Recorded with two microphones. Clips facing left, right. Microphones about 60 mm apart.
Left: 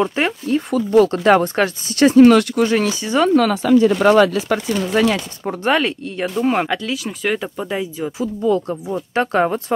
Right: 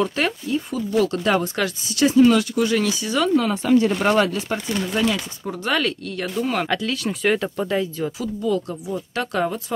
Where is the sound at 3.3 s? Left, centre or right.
Left.